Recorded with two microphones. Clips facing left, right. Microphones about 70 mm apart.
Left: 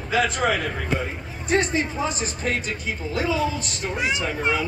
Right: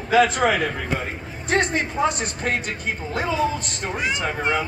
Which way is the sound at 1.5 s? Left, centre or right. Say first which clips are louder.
Even; right.